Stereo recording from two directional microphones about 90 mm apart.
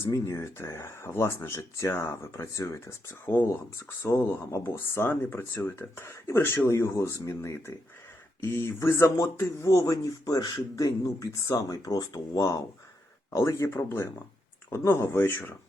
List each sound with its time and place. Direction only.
0.0 s speech: 35° left (ahead or behind)